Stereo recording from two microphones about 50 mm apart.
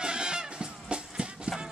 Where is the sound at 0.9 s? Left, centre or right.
Right.